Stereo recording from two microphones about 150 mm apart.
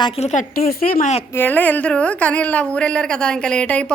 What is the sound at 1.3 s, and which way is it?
A woman's voice, 15° left (ahead or behind).